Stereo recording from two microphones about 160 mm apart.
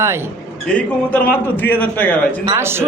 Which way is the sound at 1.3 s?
10° left (ahead or behind).